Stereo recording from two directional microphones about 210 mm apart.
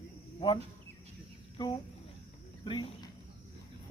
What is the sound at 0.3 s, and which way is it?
Insect, 25° left (ahead or behind).